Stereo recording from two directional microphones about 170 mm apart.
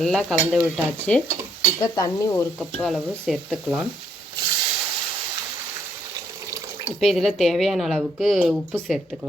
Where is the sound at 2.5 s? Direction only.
Centre (ahead or behind).